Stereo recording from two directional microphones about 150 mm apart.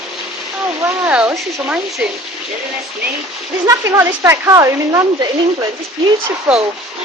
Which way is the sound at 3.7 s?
20° right (ahead or behind).